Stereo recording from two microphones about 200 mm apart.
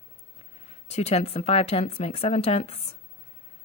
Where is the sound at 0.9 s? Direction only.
30° left (ahead or behind).